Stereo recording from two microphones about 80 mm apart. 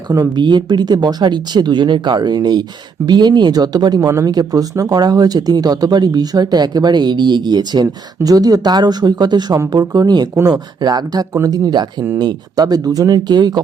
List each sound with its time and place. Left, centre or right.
0.3 s speech: right
13.1 s speech: right